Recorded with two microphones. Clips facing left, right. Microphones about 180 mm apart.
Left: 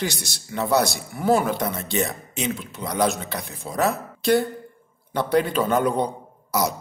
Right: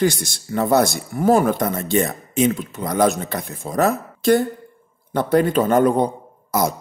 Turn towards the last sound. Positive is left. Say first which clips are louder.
# right 3 dB
turn(degrees=-50)  # may be behind; listen again after turning